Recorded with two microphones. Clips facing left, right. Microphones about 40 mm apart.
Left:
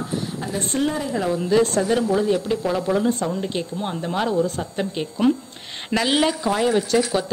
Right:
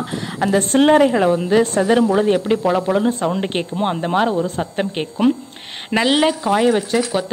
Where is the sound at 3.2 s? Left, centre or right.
Right.